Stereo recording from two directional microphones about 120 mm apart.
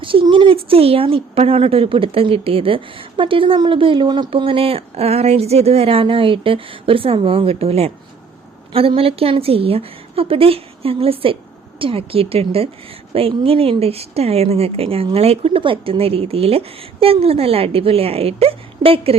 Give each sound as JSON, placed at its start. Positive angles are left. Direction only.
{"t": 0.0, "sound": "speech", "side_deg": -45}